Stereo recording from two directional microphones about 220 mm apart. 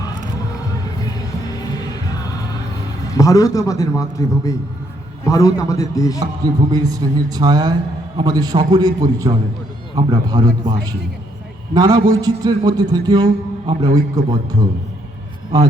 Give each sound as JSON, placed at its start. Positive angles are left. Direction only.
{"t": 3.1, "sound": "a man's voice", "side_deg": 15}
{"t": 6.1, "sound": "a man's voice", "side_deg": -20}
{"t": 15.5, "sound": "a man's voice", "side_deg": -15}